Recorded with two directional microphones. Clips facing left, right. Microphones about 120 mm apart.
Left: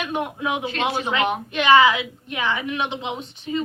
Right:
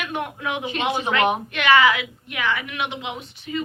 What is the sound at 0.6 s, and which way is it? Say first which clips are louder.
Speech: even; 15° right (ahead or behind).